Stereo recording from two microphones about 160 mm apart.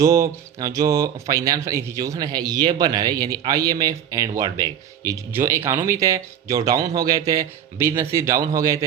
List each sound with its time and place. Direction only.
0.0 s speech: 20° right (ahead or behind)